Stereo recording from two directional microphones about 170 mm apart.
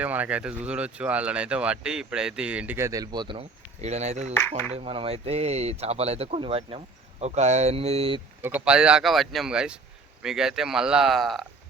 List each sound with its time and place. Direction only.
0.0 s speech: 10° right (ahead or behind); by 8.2 s 35° right (ahead or behind)
8.4 s speech: 10° right (ahead or behind)